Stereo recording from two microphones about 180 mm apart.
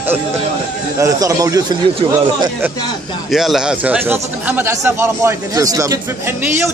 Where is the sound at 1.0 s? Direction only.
20° right (ahead or behind).